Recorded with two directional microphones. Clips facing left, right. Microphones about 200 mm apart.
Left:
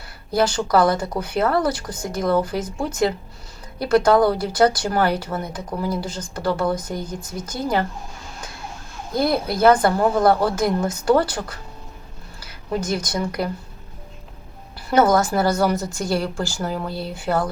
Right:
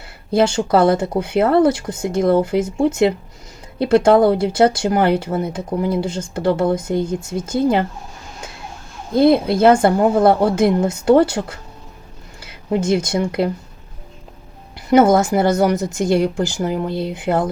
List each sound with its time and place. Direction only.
0.3 s speech: 25° right (ahead or behind)
9.1 s speech: 25° right (ahead or behind)
14.8 s speech: 20° right (ahead or behind)